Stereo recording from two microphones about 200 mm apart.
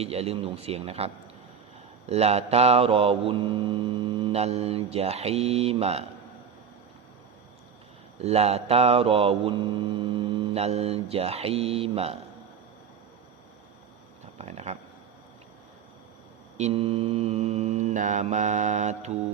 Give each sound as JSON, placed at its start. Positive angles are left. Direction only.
{"t": 0.0, "sound": "mantra", "side_deg": -30}
{"t": 8.2, "sound": "mantra", "side_deg": -30}
{"t": 14.3, "sound": "a sound", "side_deg": -35}
{"t": 16.6, "sound": "mantra", "side_deg": -30}